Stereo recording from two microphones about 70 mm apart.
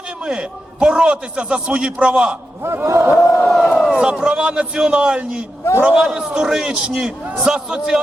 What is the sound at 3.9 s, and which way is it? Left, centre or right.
A man's voice, centre.